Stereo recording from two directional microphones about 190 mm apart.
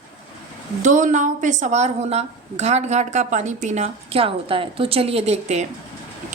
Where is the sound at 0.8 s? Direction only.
40° right (ahead or behind).